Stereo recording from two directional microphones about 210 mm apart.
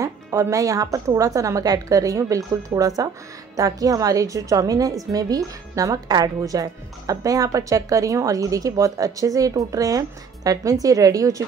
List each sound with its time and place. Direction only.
0.0 s speech: 15° right (ahead or behind)